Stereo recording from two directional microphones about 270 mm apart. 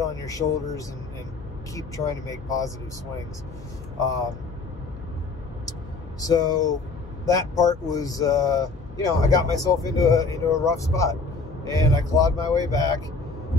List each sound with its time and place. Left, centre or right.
0.0 s speech: centre
6.2 s speech: centre